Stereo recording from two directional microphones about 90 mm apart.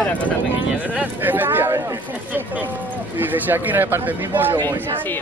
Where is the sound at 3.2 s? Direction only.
20° right (ahead or behind).